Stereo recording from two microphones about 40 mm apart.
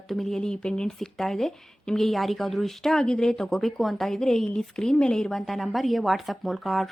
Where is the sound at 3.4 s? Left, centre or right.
Centre.